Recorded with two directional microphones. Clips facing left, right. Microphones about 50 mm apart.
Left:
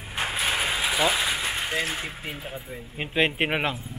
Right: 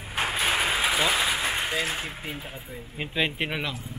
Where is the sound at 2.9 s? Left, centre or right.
Centre.